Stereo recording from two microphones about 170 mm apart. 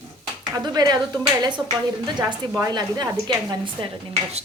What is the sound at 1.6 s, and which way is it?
Speech, 10° right (ahead or behind).